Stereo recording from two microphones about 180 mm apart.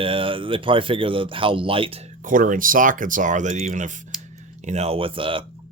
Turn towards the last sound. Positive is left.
turn(degrees=-30)  # may be behind; listen again after turning